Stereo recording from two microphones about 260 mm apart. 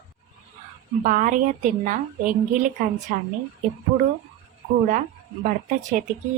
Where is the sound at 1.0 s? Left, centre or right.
Right.